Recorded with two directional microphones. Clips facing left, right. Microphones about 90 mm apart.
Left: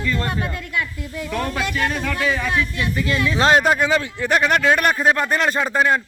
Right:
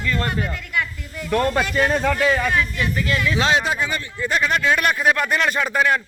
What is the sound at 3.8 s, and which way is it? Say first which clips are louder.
Speech: left 6 dB; 80° left.